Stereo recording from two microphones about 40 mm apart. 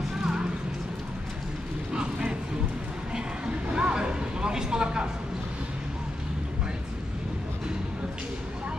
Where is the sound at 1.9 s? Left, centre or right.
Right.